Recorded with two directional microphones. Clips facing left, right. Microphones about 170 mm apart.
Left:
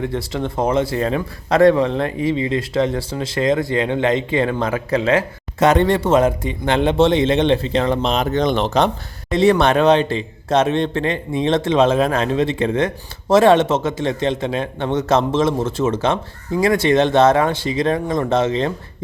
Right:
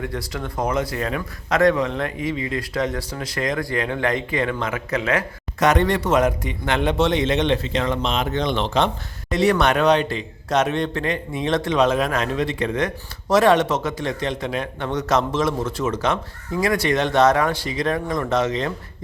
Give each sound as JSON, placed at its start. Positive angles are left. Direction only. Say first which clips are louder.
{"t": 0.0, "sound": "a man's voice", "louder": "left 6 dB", "side_deg": 25}
{"t": 9.3, "sound": "a man's voice", "louder": "left 4 dB", "side_deg": 25}